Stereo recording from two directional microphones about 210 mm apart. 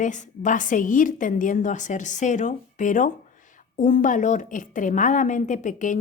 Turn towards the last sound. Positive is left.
turn(degrees=35)  # may be behind; listen again after turning